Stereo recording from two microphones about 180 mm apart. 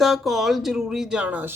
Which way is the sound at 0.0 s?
Centre (ahead or behind).